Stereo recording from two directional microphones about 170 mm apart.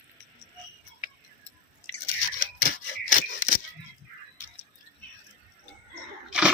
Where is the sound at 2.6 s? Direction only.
55° left (ahead or behind).